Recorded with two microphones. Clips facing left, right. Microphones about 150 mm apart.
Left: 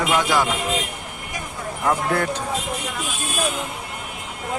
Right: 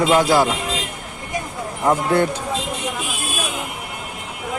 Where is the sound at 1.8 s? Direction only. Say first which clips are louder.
Right 4 dB; 25° right (ahead or behind).